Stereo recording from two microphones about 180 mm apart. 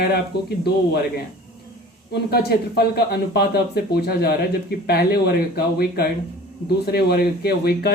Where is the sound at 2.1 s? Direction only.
65° left (ahead or behind).